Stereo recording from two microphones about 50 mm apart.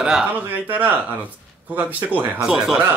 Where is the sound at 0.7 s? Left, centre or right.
Right.